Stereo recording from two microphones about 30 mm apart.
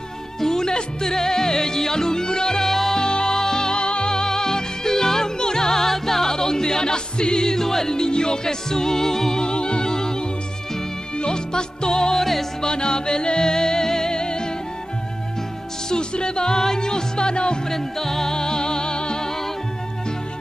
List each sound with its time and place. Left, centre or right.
0.4 s music: centre
2.7 s music: centre
3.0 s music: left
9.4 s music: left
12.2 s music: centre
12.6 s music: left
15.9 s music: left
17.6 s music: centre; by 19.2 s left